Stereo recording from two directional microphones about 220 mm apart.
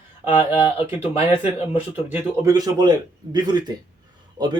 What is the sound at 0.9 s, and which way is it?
Speech, 10° right (ahead or behind).